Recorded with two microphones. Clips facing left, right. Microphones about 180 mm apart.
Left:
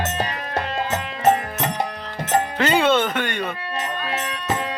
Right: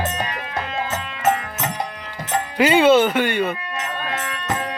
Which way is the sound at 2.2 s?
45° left (ahead or behind).